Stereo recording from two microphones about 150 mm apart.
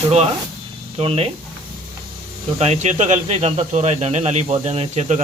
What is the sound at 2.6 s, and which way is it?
Speech, 45° right (ahead or behind).